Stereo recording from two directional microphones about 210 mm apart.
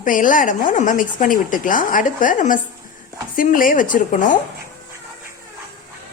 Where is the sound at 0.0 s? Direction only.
40° left (ahead or behind).